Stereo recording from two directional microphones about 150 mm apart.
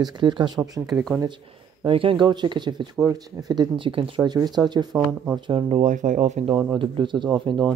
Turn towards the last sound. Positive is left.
turn(degrees=-35)  # may be behind; listen again after turning